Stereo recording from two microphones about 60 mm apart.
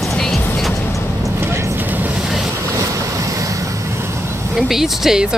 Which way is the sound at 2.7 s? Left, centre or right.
Right.